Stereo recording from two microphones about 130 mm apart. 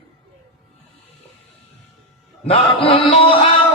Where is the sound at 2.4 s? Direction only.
50° left (ahead or behind).